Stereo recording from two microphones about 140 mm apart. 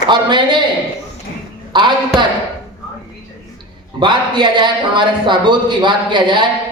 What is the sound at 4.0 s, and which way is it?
A man's voice, 35° right (ahead or behind).